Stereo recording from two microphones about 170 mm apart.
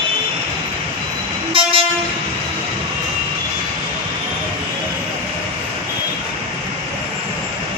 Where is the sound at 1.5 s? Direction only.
30° right (ahead or behind).